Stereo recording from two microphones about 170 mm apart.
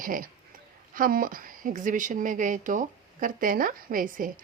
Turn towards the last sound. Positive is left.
turn(degrees=-55)  # may be behind; listen again after turning